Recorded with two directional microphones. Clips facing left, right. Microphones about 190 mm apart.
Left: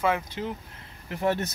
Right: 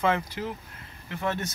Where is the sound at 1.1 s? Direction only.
40° left (ahead or behind).